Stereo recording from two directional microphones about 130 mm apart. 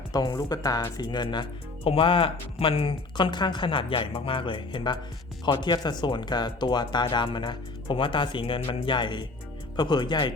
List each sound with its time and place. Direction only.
0.1 s speech: 30° left (ahead or behind)